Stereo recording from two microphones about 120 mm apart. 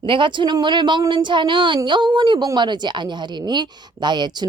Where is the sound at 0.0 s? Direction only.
45° right (ahead or behind).